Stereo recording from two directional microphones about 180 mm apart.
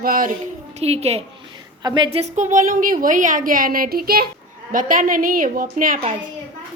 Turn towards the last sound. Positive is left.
turn(degrees=-50)  # may be behind; listen again after turning